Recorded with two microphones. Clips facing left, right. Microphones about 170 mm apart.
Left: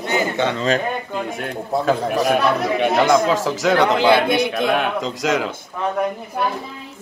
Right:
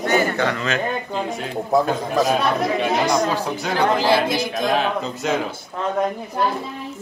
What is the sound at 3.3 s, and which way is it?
Speech, 90° left.